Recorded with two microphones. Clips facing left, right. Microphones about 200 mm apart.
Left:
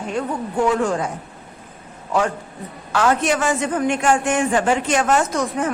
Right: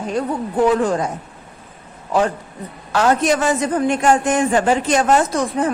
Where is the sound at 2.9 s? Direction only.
40° right (ahead or behind).